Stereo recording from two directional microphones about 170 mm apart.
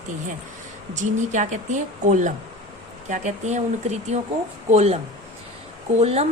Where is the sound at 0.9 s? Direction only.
45° right (ahead or behind).